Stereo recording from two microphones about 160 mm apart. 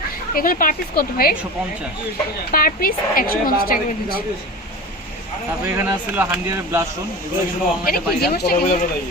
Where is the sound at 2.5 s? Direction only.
65° left (ahead or behind).